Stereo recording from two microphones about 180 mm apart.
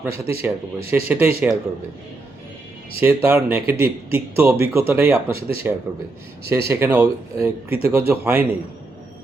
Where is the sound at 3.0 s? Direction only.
15° right (ahead or behind).